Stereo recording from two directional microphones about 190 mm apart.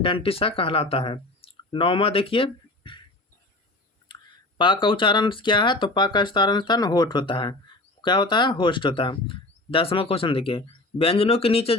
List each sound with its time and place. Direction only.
0.0 s speech: 30° left (ahead or behind)
4.1 s speech: 25° left (ahead or behind)